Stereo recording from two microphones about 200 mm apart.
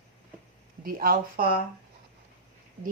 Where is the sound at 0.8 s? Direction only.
45° right (ahead or behind).